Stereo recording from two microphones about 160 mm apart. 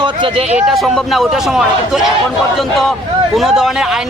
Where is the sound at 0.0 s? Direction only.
30° right (ahead or behind).